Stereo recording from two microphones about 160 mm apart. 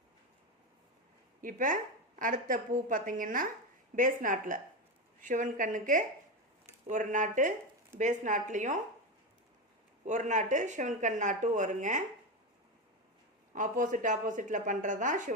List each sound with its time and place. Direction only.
1.4 s a woman's voice: 55° right (ahead or behind)
10.1 s speech: 50° right (ahead or behind)
13.5 s speech: 55° right (ahead or behind)